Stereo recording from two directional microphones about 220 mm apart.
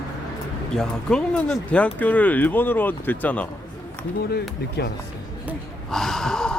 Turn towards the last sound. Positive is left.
turn(degrees=5)  # may be behind; listen again after turning